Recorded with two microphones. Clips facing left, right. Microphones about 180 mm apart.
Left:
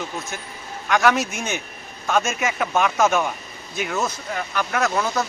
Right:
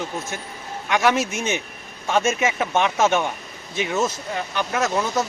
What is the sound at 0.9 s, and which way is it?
Speech, 25° right (ahead or behind).